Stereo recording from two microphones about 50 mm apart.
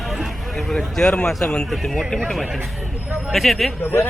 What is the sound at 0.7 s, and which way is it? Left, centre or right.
Speech, centre.